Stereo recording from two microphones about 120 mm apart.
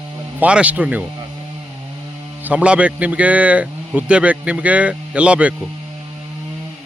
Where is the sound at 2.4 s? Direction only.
10° right (ahead or behind).